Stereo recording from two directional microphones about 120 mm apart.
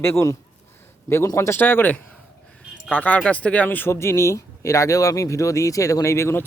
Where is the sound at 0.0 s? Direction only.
20° left (ahead or behind).